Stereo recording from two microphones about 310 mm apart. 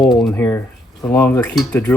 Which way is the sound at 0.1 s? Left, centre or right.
Centre.